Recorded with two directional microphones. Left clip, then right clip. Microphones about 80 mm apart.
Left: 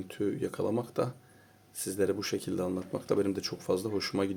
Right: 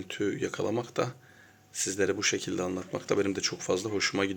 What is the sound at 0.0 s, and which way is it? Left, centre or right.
Speech, left.